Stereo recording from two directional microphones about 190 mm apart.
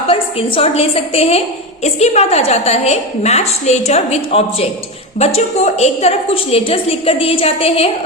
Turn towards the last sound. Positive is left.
turn(degrees=30)  # may be behind; listen again after turning